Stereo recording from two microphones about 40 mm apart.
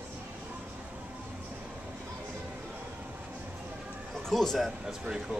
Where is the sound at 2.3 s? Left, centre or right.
Right.